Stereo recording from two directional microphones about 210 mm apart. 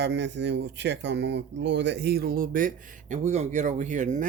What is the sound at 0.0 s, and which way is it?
Speech, 55° right (ahead or behind).